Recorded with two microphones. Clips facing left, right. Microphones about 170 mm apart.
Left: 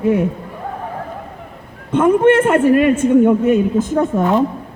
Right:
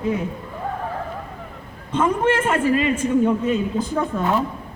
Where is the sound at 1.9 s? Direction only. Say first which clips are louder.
Left 8 dB; 60° left (ahead or behind).